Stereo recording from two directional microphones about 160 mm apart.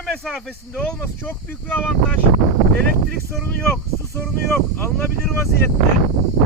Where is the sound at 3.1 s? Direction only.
5° left (ahead or behind).